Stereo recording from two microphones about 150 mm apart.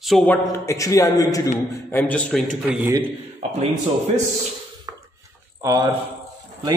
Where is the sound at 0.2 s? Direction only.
15° left (ahead or behind).